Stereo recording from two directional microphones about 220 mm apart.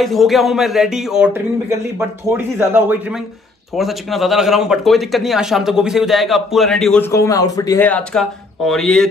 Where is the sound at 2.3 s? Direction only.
10° right (ahead or behind).